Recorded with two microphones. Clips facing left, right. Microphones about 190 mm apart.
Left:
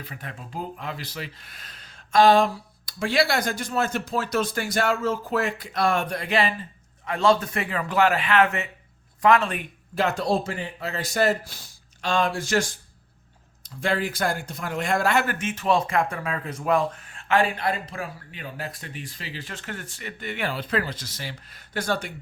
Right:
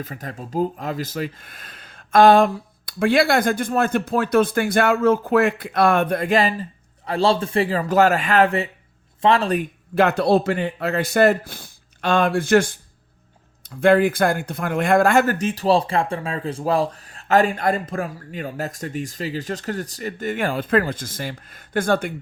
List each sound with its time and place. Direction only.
0.0 s speech: 40° right (ahead or behind)
9.9 s speech: 60° right (ahead or behind)
13.8 s speech: 55° right (ahead or behind)